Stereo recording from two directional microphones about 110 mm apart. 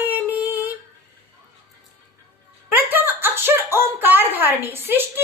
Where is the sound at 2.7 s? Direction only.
20° right (ahead or behind).